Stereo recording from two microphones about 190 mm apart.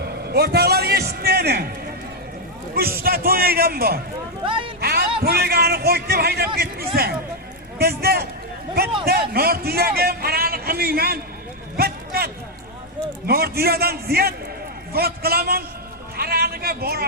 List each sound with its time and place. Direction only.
0.0 s a man's voice: 55° right (ahead or behind)
2.7 s a man's voice: 50° right (ahead or behind)
4.4 s speech: 25° right (ahead or behind)
4.8 s a sound: 55° right (ahead or behind)
5.2 s a man's voice: 55° right (ahead or behind)
16.1 s a sound: 55° right (ahead or behind)